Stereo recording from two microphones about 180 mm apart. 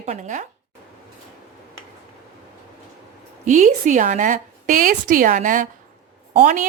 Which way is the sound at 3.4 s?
45° right (ahead or behind).